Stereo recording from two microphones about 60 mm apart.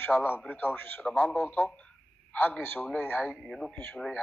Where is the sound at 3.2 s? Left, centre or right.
Centre.